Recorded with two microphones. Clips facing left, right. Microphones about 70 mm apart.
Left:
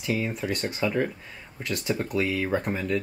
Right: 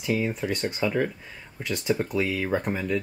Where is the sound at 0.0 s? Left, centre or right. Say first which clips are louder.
Right 2 dB; centre.